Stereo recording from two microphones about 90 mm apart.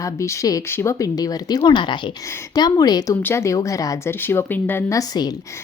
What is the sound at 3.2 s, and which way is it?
Speech, 30° left (ahead or behind).